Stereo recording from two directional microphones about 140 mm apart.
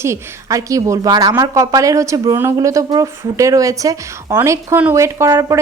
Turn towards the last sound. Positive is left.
turn(degrees=-20)  # may be behind; listen again after turning